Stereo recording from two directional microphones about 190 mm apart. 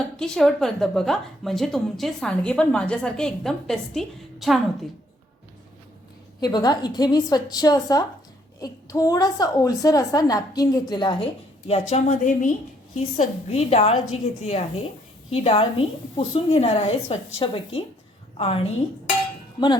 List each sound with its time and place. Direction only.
0.2 s a woman's voice: centre (ahead or behind)
6.4 s a woman's voice: 20° left (ahead or behind)
11.7 s a woman's voice: 35° left (ahead or behind)